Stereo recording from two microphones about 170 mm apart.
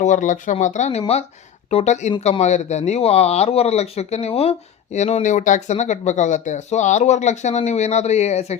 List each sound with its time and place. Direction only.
0.0 s speech: 45° left (ahead or behind)